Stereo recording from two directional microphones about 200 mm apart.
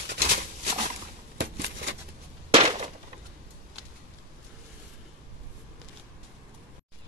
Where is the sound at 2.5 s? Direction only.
30° right (ahead or behind).